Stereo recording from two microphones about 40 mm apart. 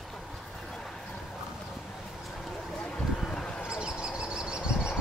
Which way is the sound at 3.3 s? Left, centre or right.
Left.